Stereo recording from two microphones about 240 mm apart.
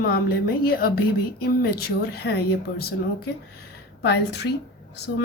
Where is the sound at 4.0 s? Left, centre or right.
Left.